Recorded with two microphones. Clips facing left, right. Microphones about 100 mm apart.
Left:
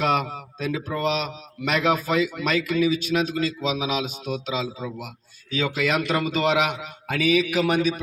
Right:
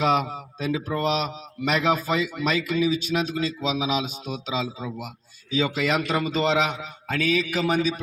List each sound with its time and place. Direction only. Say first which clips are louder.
0.0 s a man's voice: right 1 dB; centre (ahead or behind)